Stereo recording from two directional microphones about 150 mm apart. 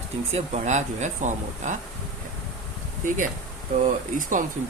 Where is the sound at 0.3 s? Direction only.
50° right (ahead or behind).